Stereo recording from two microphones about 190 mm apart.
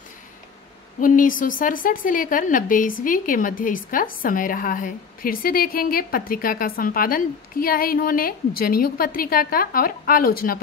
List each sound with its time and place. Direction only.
1.0 s a woman's voice: 45° left (ahead or behind)